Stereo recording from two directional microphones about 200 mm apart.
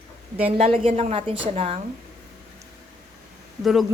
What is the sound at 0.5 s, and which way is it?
Speech, 30° right (ahead or behind).